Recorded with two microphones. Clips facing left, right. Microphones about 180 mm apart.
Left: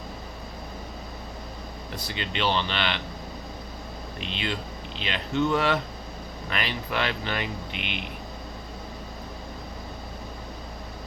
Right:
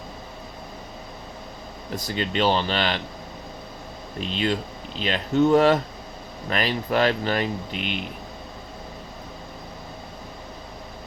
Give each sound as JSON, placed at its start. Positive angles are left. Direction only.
{"t": 2.0, "sound": "speech", "side_deg": -40}
{"t": 4.2, "sound": "speech", "side_deg": -40}